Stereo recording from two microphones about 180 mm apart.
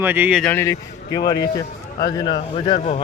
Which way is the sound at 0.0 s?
10° right (ahead or behind).